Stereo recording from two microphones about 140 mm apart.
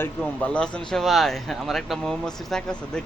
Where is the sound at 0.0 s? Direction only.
10° left (ahead or behind).